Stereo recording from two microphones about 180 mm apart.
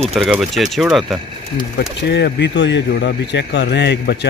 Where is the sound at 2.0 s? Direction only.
75° left (ahead or behind).